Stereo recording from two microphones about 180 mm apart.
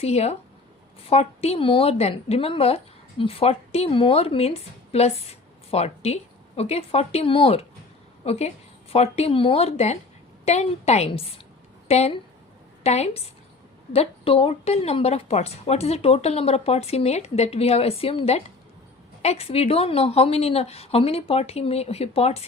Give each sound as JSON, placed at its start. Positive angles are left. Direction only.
{"t": 0.0, "sound": "a woman's voice", "side_deg": 35}